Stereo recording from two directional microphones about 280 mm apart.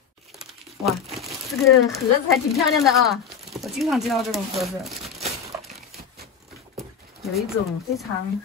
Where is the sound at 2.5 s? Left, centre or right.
Centre.